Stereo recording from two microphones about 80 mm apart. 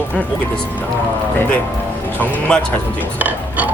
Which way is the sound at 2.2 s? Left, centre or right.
Centre.